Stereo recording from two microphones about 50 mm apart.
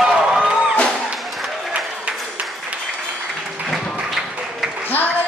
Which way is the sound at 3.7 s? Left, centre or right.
Centre.